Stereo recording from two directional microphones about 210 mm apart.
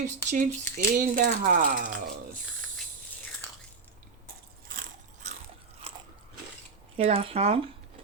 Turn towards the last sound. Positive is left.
turn(degrees=-30)  # may be behind; listen again after turning